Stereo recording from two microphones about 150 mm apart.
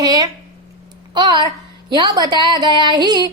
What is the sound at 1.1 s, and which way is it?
Female singing, 30° right (ahead or behind).